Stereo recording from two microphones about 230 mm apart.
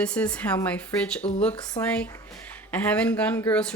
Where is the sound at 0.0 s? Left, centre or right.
Centre.